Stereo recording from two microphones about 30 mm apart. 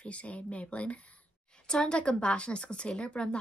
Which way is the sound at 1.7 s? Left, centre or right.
Left.